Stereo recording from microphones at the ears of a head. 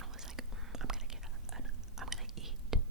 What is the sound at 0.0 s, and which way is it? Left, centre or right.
Whispering, right.